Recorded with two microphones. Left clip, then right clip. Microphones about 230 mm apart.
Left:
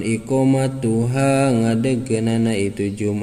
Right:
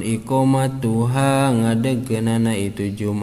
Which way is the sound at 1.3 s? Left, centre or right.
Centre.